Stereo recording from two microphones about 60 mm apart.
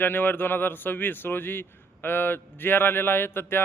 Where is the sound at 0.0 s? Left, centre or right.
Left.